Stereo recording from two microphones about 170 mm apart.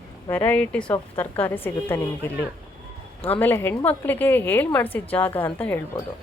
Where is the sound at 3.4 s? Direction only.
10° left (ahead or behind).